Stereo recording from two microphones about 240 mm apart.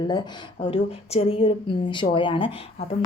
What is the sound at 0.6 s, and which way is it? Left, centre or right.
A woman's voice, left.